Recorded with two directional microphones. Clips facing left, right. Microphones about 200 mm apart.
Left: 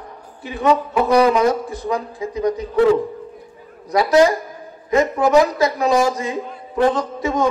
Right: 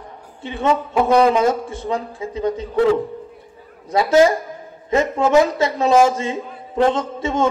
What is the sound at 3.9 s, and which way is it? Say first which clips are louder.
Speech: even; 25° right (ahead or behind).